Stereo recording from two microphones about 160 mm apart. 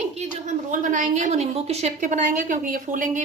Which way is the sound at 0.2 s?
50° right (ahead or behind).